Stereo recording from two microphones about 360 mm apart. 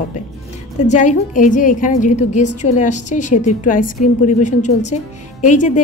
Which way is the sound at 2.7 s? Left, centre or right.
Centre.